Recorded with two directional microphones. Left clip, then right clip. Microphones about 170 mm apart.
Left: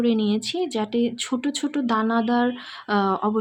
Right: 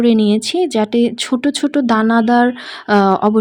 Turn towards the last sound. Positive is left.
turn(degrees=-40)  # may be behind; listen again after turning